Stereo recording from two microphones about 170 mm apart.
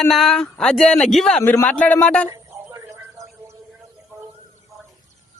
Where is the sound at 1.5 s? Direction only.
10° left (ahead or behind).